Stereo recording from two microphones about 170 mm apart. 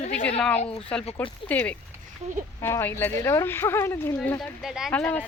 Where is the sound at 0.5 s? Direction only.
40° left (ahead or behind).